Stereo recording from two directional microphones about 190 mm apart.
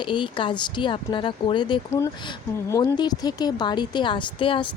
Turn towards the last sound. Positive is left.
turn(degrees=25)  # may be behind; listen again after turning